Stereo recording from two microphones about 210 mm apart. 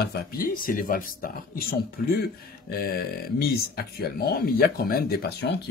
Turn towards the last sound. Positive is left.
turn(degrees=50)  # may be behind; listen again after turning